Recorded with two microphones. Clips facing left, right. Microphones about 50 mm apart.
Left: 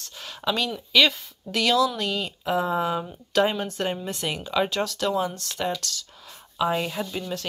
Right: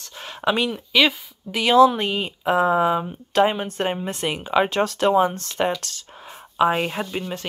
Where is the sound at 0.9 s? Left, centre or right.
Centre.